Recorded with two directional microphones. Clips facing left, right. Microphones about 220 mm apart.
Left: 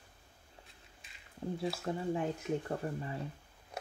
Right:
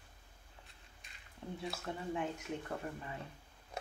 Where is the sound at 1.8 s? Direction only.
35° left (ahead or behind).